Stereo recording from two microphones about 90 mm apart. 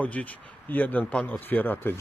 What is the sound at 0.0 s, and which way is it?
Speech, 15° left (ahead or behind).